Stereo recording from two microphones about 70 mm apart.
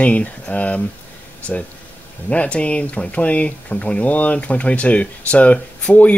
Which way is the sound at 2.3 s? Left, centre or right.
Centre.